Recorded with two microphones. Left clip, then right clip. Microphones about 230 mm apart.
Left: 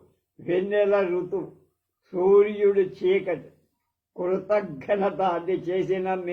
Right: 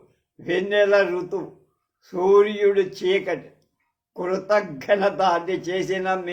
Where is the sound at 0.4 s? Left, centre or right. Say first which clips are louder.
Right 3 dB; right.